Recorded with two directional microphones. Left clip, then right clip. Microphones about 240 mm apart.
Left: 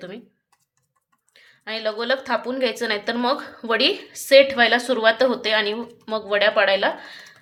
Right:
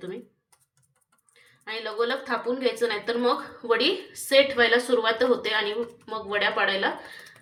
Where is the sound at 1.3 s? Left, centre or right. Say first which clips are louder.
Left 4 dB; left.